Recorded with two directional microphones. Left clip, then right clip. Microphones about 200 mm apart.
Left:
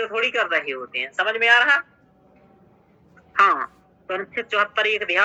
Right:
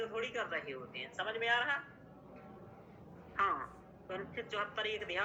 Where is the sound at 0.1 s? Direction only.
40° left (ahead or behind).